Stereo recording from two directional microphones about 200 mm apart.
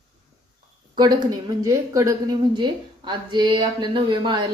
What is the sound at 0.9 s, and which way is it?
A woman's voice, 20° right (ahead or behind).